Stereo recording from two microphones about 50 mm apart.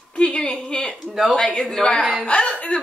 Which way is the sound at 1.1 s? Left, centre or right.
Centre.